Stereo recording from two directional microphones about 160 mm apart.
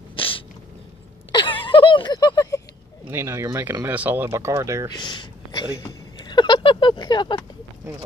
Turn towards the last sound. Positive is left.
turn(degrees=30)  # may be behind; listen again after turning